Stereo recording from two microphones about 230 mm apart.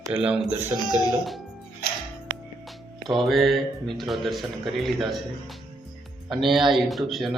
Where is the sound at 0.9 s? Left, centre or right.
Centre.